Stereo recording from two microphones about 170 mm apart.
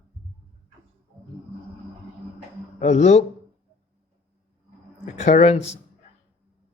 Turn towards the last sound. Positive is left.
turn(degrees=40)  # may be behind; listen again after turning